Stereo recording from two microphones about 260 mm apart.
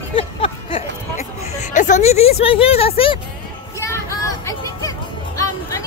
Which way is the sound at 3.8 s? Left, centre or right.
Centre.